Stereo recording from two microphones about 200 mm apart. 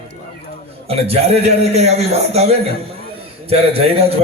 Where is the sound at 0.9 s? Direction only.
30° right (ahead or behind).